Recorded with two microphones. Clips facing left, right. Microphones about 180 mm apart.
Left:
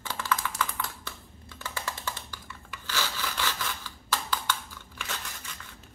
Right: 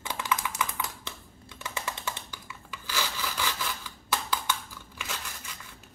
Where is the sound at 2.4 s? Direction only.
10° right (ahead or behind).